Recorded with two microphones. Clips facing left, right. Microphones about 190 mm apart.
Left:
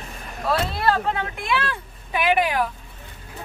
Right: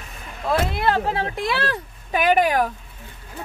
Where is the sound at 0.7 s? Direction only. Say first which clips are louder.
Even; 20° right (ahead or behind).